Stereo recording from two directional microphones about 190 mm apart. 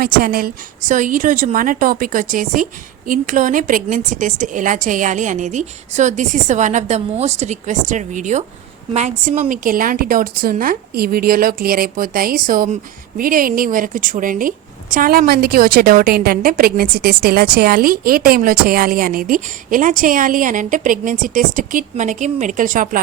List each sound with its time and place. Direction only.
0.0 s a woman's voice: 50° right (ahead or behind)